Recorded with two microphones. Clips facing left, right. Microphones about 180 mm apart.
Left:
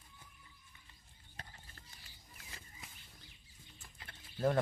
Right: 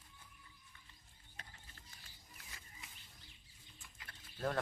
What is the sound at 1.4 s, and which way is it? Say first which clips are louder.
Horse: left 4 dB; 35° left (ahead or behind).